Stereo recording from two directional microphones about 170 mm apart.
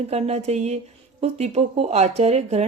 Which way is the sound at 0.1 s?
40° right (ahead or behind).